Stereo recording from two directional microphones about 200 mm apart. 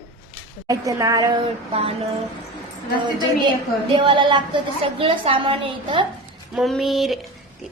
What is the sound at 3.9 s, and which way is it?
A woman's voice, 25° right (ahead or behind).